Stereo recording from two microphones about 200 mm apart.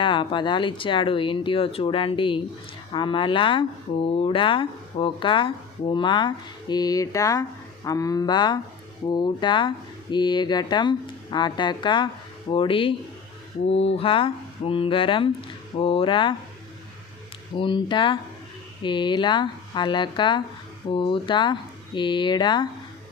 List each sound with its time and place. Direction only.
0.0 s speech: 25° left (ahead or behind)
13.7 s speech: 65° left (ahead or behind)
13.9 s speech: 25° left (ahead or behind)
17.6 s speech: 25° left (ahead or behind)